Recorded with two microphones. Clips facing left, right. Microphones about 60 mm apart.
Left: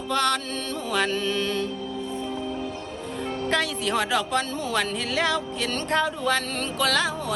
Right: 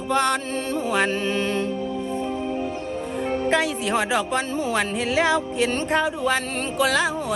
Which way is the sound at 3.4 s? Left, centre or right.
Centre.